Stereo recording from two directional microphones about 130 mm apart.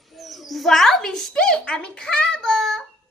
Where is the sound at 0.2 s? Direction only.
Centre (ahead or behind).